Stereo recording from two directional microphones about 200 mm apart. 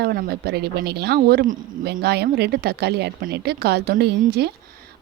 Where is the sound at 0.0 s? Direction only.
55° right (ahead or behind).